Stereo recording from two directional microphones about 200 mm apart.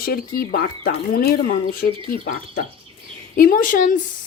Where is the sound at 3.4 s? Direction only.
45° left (ahead or behind).